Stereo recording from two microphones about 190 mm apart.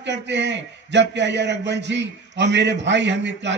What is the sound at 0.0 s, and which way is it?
A man's voice, 65° right (ahead or behind).